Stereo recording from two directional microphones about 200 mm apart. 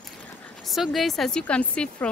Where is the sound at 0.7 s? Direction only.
Centre (ahead or behind).